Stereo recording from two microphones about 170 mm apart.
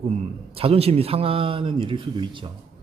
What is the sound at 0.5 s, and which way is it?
Speech, 35° right (ahead or behind).